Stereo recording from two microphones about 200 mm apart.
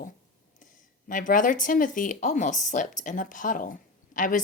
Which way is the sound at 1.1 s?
40° left (ahead or behind).